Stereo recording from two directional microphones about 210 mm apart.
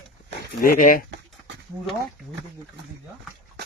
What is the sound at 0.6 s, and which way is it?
Speech, 40° left (ahead or behind).